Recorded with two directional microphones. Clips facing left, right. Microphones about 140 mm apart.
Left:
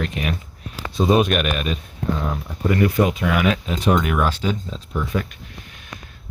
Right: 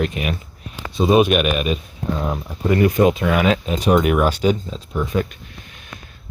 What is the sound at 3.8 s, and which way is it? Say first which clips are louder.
Speech: right 3 dB; 15° right (ahead or behind).